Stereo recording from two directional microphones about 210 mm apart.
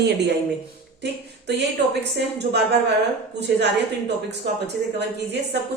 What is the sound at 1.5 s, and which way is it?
Speech, 55° right (ahead or behind).